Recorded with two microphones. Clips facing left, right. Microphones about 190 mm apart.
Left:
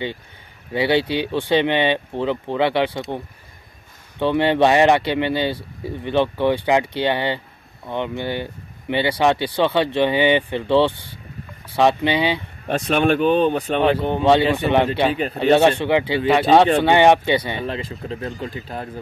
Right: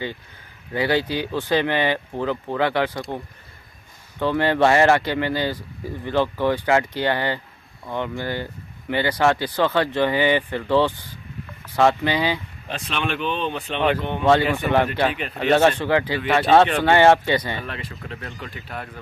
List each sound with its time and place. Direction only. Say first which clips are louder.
0.7 s speech: left 3 dB; 20° left (ahead or behind)
4.2 s speech: left 2 dB; 20° left (ahead or behind)
12.6 s speech: left 10 dB; 45° left (ahead or behind)
14.2 s speech: left 2 dB; 20° left (ahead or behind)